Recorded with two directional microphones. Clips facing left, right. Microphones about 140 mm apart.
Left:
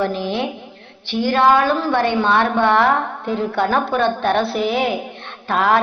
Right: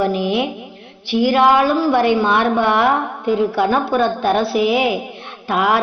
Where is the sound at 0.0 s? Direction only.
10° right (ahead or behind).